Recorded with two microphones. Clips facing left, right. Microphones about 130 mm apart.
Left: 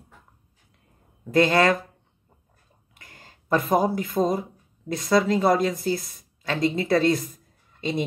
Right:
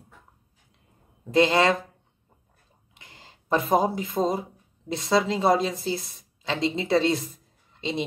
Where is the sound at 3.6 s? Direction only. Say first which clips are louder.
Even; 25° right (ahead or behind).